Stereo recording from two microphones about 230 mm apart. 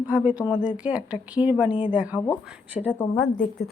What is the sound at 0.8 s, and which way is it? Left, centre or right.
A woman's voice, centre.